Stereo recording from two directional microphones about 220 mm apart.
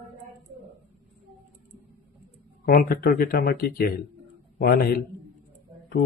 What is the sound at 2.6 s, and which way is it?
Speech, 45° left (ahead or behind).